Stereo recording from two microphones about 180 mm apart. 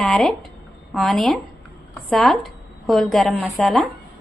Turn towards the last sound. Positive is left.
turn(degrees=0)  # may be behind; listen again after turning